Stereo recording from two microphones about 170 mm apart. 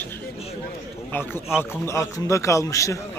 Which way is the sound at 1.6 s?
15° left (ahead or behind).